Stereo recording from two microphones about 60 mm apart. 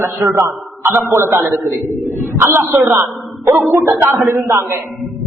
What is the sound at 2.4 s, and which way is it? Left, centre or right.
A man's voice, right.